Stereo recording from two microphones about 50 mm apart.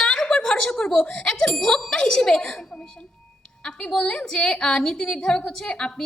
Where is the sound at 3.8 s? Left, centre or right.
Centre.